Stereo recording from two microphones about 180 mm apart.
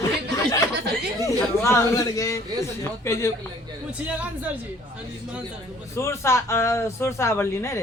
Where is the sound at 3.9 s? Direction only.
5° right (ahead or behind).